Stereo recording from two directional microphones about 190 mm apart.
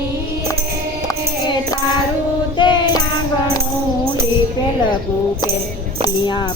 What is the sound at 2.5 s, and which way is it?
Child singing, 25° left (ahead or behind).